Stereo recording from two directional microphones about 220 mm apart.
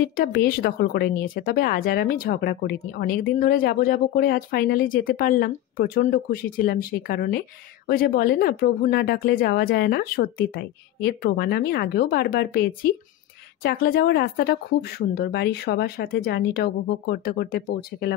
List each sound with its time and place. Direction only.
0.1 s speech: 40° left (ahead or behind)